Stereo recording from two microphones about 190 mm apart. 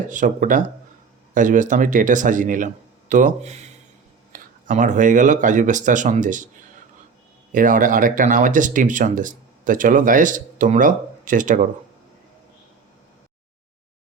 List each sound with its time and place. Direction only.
0.1 s speech: 45° right (ahead or behind)
7.5 s speech: 45° right (ahead or behind)